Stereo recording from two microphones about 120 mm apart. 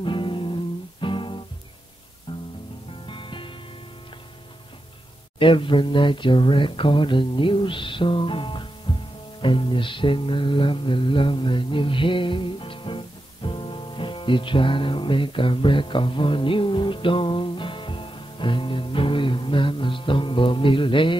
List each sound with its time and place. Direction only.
0.0 s music: 45° left (ahead or behind)
3.1 s music: 45° left (ahead or behind)
5.4 s speech: 45° left (ahead or behind)
9.4 s music: 45° left (ahead or behind)